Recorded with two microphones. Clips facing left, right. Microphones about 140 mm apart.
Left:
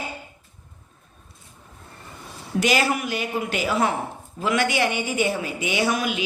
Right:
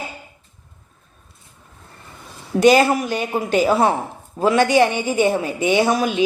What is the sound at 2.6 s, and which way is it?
A man's voice, 40° right (ahead or behind).